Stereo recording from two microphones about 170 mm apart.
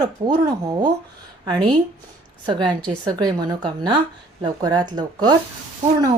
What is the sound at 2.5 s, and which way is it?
Speech, 25° right (ahead or behind).